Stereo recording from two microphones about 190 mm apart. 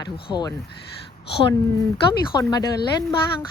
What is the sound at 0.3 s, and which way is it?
Speech, 15° left (ahead or behind).